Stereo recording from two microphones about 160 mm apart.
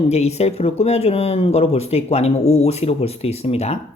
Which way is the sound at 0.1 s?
40° left (ahead or behind).